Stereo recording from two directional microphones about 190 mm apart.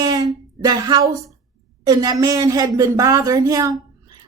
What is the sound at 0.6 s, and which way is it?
A woman's voice, 20° right (ahead or behind).